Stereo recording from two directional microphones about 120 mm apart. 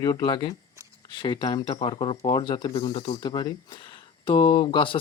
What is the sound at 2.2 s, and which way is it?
Speech, 35° left (ahead or behind).